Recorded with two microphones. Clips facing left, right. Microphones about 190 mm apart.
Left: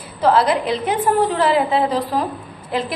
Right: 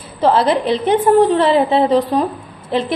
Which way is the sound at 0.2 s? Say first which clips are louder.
Right 2 dB; 25° right (ahead or behind).